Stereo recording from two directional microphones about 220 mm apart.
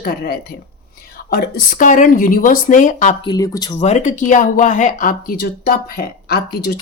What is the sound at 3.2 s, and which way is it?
Speech, 20° left (ahead or behind).